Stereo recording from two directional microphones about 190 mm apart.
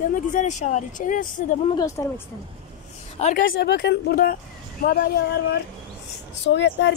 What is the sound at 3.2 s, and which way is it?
Speech, 45° left (ahead or behind).